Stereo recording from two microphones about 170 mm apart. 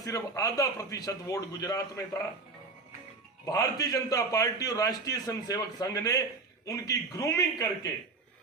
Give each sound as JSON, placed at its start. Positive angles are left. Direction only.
{"t": 0.0, "sound": "a man's voice", "side_deg": 20}
{"t": 3.4, "sound": "a man's voice", "side_deg": 20}